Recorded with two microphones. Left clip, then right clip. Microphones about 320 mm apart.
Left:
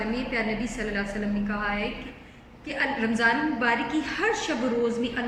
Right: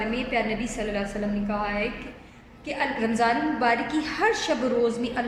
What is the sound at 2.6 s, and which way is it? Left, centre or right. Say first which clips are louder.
A woman's voice: even; centre.